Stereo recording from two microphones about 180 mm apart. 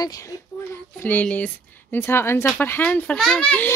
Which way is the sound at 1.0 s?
10° left (ahead or behind).